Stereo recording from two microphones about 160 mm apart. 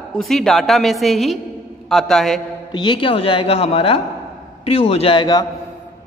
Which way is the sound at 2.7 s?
30° left (ahead or behind).